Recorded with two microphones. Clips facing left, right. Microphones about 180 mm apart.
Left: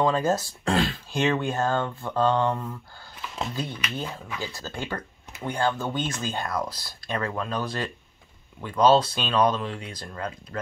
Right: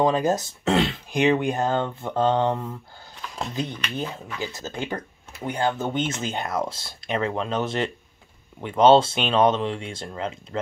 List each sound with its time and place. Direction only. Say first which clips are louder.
0.0 s speech: right 2 dB; 20° right (ahead or behind)